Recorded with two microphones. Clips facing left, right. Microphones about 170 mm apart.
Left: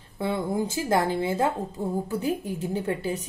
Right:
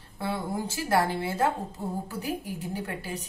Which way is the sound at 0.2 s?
20° left (ahead or behind).